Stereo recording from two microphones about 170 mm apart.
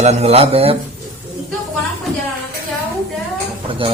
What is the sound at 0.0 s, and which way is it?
Speech, 40° right (ahead or behind).